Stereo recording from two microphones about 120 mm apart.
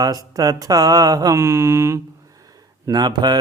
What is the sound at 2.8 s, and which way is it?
Mantra, 35° right (ahead or behind).